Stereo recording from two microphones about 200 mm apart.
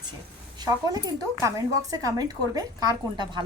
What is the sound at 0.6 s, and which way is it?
Speech, 15° right (ahead or behind).